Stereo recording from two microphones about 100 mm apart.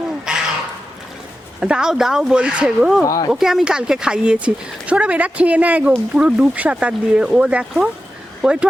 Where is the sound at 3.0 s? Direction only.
35° left (ahead or behind).